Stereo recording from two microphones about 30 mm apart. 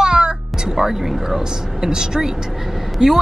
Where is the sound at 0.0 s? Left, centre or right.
Right.